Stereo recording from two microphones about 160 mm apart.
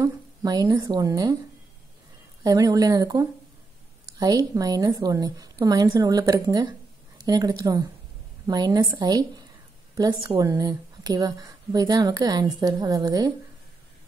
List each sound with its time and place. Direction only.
0.0 s speech: 25° right (ahead or behind)
2.4 s a woman's voice: 20° right (ahead or behind)